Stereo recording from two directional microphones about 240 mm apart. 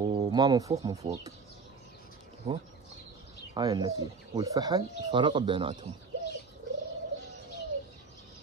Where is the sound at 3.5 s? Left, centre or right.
Centre.